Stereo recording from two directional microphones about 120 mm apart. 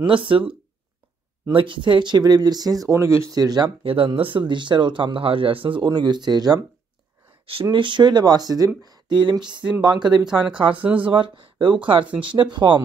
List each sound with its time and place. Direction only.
0.0 s speech: 45° right (ahead or behind)
7.7 s speech: 40° right (ahead or behind)
10.2 s speech: 5° right (ahead or behind)
11.1 s speech: 45° right (ahead or behind)